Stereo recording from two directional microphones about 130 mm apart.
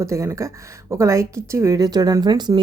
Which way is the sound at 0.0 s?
20° right (ahead or behind).